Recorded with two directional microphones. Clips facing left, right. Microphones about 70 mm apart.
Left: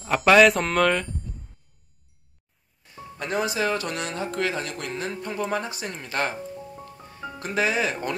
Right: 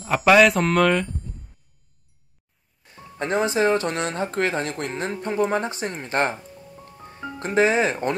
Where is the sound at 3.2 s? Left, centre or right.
Right.